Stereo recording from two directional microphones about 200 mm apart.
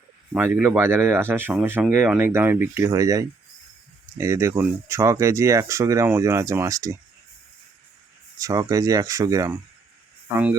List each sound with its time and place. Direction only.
0.3 s speech: 10° right (ahead or behind)
8.4 s speech: 15° right (ahead or behind)